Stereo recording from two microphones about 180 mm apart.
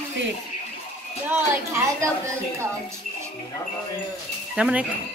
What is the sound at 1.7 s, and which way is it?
A woman's voice, 15° right (ahead or behind).